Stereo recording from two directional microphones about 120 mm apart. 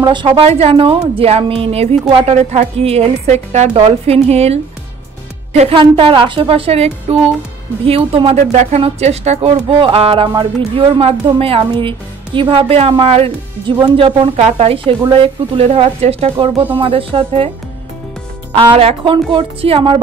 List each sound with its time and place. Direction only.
0.0 s a woman's voice: 40° right (ahead or behind)
2.1 s a woman's voice: 70° right (ahead or behind)
3.7 s a woman's voice: 55° right (ahead or behind)
9.8 s a woman's voice: 50° right (ahead or behind)
13.7 s a woman's voice: 40° right (ahead or behind)
18.6 s a woman's voice: 50° right (ahead or behind)